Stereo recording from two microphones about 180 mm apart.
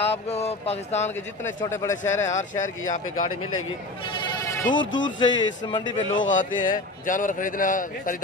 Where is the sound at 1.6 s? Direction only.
15° left (ahead or behind).